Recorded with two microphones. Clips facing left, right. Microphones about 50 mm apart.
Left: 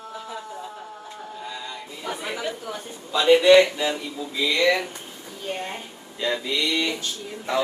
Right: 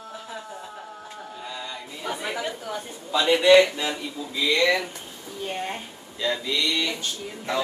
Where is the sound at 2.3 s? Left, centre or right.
Centre.